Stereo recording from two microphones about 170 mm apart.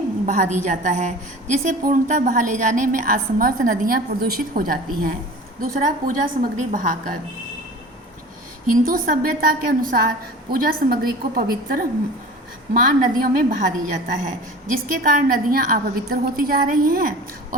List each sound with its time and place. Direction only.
0.3 s a woman's voice: 50° right (ahead or behind)
8.7 s a woman's voice: 55° right (ahead or behind)